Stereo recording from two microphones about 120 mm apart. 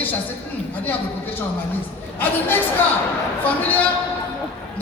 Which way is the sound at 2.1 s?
15° left (ahead or behind).